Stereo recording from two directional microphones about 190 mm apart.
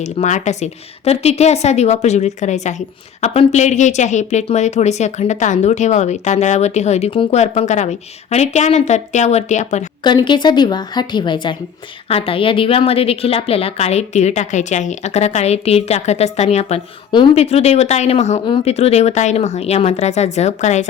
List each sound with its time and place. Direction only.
0.0 s a woman's voice: 40° left (ahead or behind)
10.0 s a woman's voice: 25° left (ahead or behind)